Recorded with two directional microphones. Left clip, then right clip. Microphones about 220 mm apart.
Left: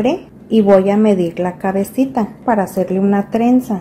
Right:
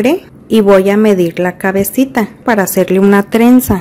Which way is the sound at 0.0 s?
30° right (ahead or behind).